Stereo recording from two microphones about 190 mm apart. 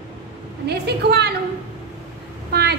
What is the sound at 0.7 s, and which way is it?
Speech, 60° right (ahead or behind).